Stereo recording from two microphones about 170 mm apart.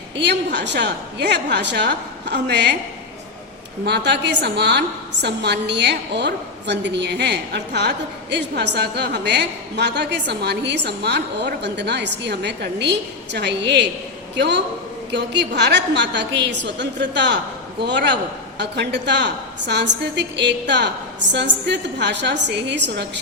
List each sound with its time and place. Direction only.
0.2 s a woman's voice: 85° right
3.8 s a woman's voice: 80° right